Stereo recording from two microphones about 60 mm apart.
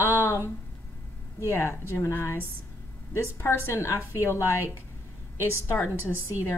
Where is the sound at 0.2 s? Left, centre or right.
Left.